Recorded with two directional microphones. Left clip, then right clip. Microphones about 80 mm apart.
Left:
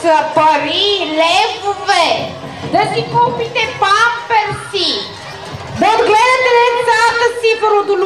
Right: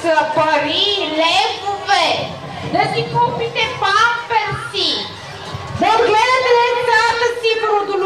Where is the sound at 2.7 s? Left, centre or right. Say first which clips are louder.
Left 3 dB; left.